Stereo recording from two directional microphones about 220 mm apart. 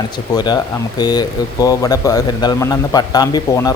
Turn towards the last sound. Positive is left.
turn(degrees=15)  # may be behind; listen again after turning